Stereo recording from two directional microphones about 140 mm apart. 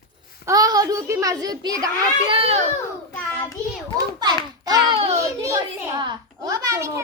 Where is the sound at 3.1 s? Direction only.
15° left (ahead or behind).